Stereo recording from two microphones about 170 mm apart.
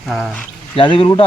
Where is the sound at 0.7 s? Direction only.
30° left (ahead or behind).